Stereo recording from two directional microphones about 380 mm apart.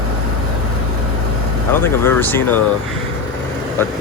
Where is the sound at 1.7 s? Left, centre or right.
Centre.